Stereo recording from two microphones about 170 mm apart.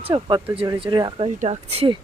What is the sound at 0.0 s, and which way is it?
Speech, 25° right (ahead or behind).